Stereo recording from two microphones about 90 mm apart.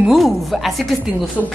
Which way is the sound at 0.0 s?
Centre (ahead or behind).